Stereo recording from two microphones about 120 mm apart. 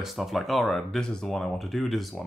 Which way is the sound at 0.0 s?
Centre (ahead or behind).